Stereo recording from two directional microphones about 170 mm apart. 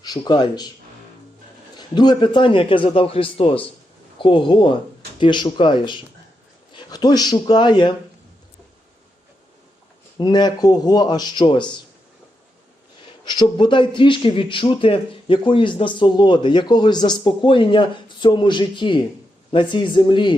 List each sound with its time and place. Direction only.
0.0 s speech: 25° left (ahead or behind)
1.7 s a man's voice: 25° left (ahead or behind)
10.2 s speech: 25° left (ahead or behind)
13.2 s speech: 25° left (ahead or behind)